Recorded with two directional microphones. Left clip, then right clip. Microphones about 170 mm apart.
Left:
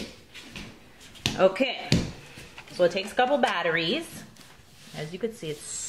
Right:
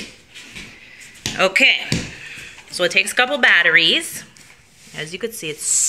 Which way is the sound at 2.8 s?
5° right (ahead or behind).